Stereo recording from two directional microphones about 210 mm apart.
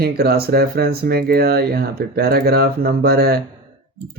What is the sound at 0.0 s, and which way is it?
Speech, 45° right (ahead or behind).